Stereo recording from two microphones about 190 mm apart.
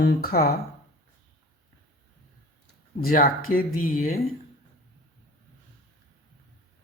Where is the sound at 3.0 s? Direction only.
50° left (ahead or behind).